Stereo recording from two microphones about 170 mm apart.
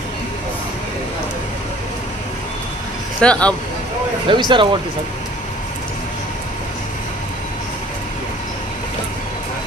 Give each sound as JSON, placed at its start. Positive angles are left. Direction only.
{"t": 3.2, "sound": "speech", "side_deg": 5}
{"t": 4.3, "sound": "speech", "side_deg": -30}